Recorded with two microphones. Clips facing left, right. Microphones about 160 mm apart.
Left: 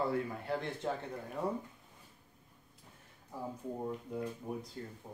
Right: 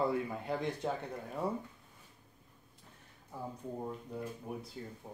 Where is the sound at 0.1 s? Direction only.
15° right (ahead or behind).